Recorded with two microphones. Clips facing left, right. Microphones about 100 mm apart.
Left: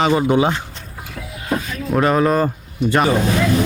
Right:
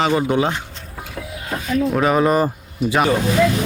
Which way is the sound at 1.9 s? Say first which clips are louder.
Left 3 dB; centre (ahead or behind).